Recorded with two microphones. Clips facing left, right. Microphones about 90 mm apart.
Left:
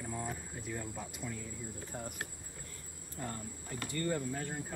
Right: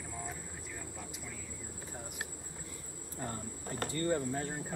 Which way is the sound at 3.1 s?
25° right (ahead or behind).